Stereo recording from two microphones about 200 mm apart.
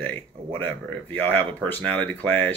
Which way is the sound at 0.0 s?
10° left (ahead or behind).